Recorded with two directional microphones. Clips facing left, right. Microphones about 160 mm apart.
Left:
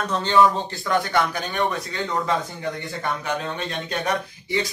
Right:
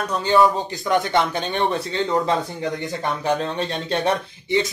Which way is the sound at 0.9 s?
25° right (ahead or behind).